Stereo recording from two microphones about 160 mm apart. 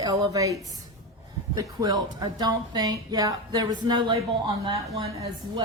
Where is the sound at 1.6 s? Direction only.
25° right (ahead or behind).